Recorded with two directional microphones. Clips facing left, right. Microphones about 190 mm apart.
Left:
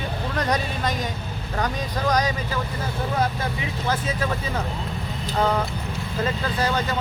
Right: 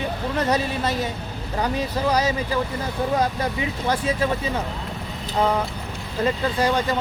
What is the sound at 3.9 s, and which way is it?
Speech, 30° right (ahead or behind).